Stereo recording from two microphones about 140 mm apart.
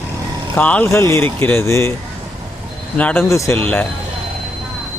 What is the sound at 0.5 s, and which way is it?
Speech, 10° left (ahead or behind).